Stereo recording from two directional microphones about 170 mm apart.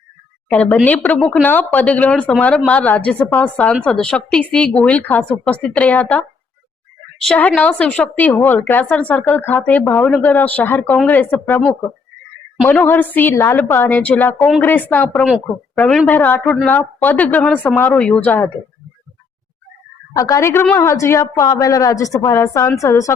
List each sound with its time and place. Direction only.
0.4 s a woman's voice: 10° left (ahead or behind)
20.1 s a woman's voice: 20° left (ahead or behind)